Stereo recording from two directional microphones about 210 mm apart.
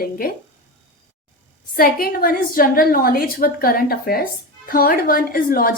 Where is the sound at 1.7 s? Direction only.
45° left (ahead or behind).